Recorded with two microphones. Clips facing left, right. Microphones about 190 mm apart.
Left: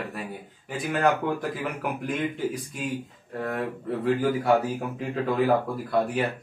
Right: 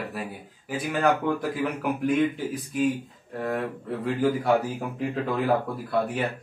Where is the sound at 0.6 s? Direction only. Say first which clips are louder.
Even; centre (ahead or behind).